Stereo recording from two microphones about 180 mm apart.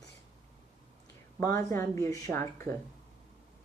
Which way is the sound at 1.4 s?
15° left (ahead or behind).